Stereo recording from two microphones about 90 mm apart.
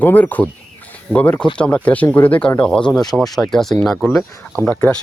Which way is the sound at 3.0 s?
45° left (ahead or behind).